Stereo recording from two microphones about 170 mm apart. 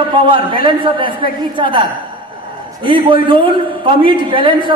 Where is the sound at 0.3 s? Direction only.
30° right (ahead or behind).